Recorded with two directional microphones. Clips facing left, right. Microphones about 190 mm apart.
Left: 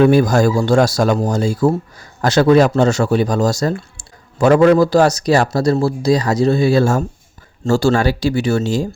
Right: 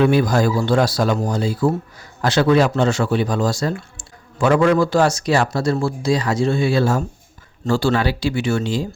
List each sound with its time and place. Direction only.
0.0 s speech: 45° left (ahead or behind)